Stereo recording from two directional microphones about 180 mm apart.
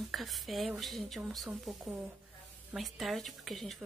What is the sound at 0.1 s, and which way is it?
Speech, centre (ahead or behind).